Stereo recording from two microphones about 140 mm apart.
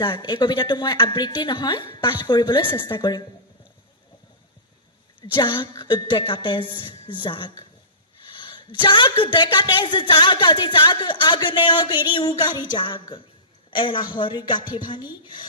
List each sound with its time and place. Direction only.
0.0 s a woman's voice: 30° left (ahead or behind)
5.3 s a woman's voice: 35° left (ahead or behind)